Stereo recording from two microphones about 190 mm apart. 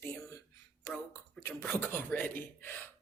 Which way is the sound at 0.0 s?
15° left (ahead or behind).